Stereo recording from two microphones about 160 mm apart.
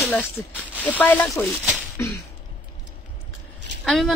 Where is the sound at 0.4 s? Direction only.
10° left (ahead or behind).